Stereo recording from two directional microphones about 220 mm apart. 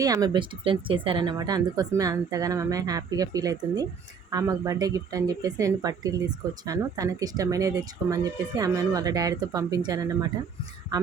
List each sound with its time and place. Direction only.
0.0 s speech: 15° right (ahead or behind)